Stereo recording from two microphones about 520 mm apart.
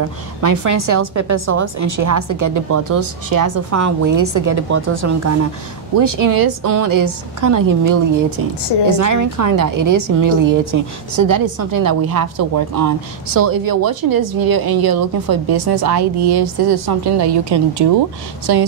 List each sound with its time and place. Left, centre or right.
0.4 s a woman's voice: right